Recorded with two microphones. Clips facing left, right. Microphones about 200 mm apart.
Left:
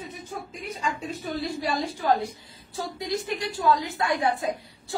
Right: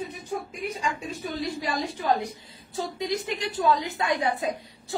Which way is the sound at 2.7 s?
20° right (ahead or behind).